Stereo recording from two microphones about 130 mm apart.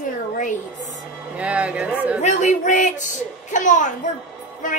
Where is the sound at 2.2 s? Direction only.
65° left (ahead or behind).